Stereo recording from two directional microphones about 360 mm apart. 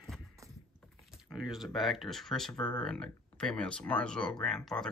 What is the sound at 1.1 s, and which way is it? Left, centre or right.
Speech, centre.